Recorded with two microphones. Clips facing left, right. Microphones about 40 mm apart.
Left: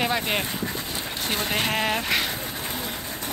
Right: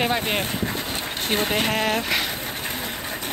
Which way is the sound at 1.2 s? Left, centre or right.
Right.